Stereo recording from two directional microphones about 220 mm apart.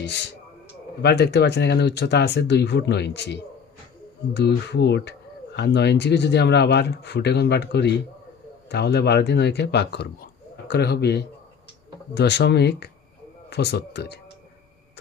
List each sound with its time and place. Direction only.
1.0 s speech: 50° left (ahead or behind)
4.4 s speech: 50° left (ahead or behind)